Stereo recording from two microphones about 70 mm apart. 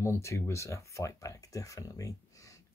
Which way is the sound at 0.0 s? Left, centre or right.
Left.